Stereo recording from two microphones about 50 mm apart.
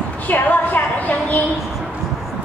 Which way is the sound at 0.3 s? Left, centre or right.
Left.